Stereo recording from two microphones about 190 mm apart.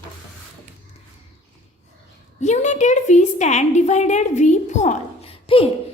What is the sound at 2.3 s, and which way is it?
A woman's voice, 40° left (ahead or behind).